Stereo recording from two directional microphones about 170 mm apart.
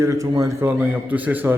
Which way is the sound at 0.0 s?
20° right (ahead or behind).